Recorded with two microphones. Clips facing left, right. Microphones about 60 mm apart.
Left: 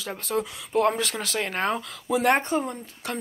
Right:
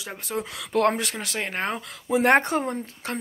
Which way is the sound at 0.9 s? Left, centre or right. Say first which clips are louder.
Left 1 dB; right.